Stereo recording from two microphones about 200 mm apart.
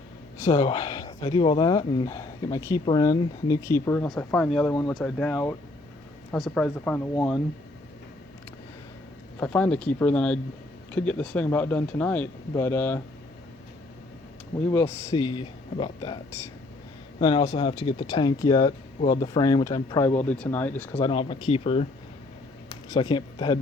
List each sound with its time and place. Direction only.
0.3 s speech: 15° left (ahead or behind)
9.4 s speech: 5° left (ahead or behind)
14.6 s speech: 10° left (ahead or behind)
21.0 s speech: 25° left (ahead or behind)